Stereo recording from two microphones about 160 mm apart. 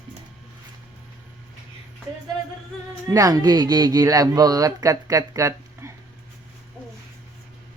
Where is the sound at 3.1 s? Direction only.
20° right (ahead or behind).